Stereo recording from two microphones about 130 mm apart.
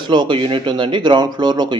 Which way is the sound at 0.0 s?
40° right (ahead or behind).